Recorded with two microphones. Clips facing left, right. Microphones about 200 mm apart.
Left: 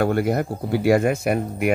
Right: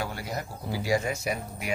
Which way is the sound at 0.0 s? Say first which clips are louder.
Left 14 dB; 60° left (ahead or behind).